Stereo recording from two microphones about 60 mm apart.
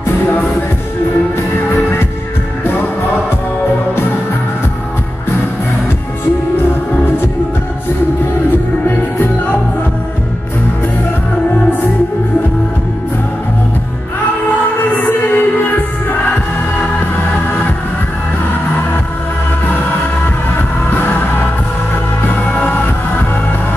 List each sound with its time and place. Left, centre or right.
14.8 s music: left
22.5 s music: left